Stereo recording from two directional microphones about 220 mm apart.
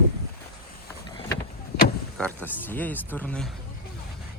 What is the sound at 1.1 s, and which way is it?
Vehicle, 20° left (ahead or behind).